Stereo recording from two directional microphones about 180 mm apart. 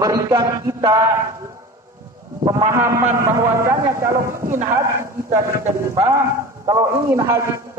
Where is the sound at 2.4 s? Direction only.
20° right (ahead or behind).